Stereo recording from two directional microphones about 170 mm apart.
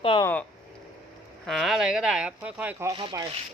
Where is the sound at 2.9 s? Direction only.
25° right (ahead or behind).